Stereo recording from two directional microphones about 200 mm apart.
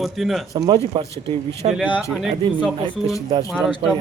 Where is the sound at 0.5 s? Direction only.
20° right (ahead or behind).